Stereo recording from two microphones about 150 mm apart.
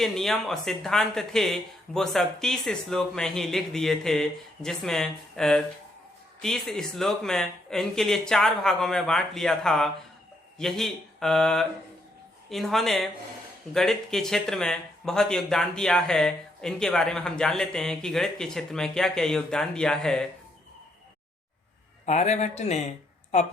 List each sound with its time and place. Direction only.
0.0 s speech: centre (ahead or behind)
22.0 s speech: 50° left (ahead or behind)